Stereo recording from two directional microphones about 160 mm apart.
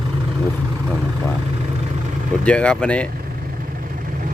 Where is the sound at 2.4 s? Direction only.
5° left (ahead or behind).